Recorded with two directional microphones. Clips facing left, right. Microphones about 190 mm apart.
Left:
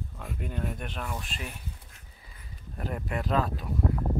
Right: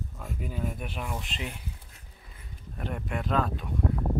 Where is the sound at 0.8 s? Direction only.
10° right (ahead or behind).